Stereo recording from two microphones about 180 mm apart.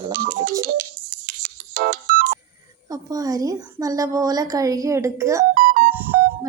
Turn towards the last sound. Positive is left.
turn(degrees=-10)  # may be behind; listen again after turning